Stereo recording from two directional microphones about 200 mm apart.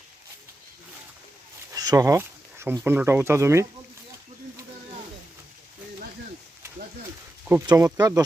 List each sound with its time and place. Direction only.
1.7 s a sound: 20° right (ahead or behind)
2.8 s speech: 10° right (ahead or behind)
7.7 s speech: 20° right (ahead or behind)